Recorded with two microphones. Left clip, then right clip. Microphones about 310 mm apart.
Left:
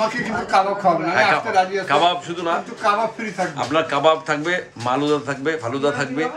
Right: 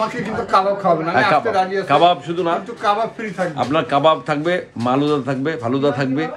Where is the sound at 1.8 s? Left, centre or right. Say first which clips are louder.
Right 3 dB; right.